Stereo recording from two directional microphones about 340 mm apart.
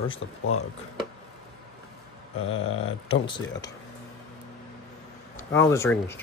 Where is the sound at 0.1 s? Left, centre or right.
Left.